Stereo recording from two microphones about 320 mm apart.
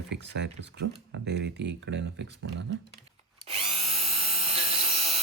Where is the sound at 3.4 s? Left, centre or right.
Centre.